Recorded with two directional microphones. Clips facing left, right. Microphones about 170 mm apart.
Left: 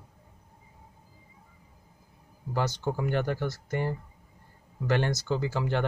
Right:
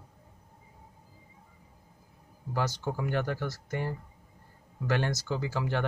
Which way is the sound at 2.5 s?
20° left (ahead or behind).